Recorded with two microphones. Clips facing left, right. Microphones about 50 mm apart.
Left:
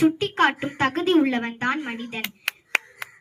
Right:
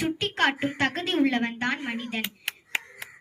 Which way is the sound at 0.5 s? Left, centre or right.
Right.